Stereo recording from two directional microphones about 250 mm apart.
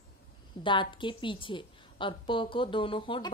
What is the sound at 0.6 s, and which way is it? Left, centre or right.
A woman's voice, centre.